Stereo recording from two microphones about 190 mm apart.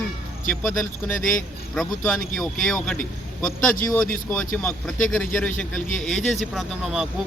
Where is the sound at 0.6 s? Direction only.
10° left (ahead or behind).